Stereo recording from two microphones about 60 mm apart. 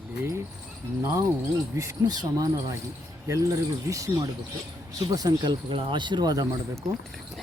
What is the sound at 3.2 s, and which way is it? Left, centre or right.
Speech, right.